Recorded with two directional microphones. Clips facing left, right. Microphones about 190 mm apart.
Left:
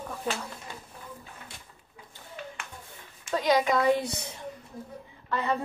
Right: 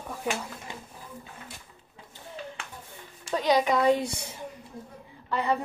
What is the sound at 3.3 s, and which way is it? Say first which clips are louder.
Speech: right 1 dB; 15° right (ahead or behind).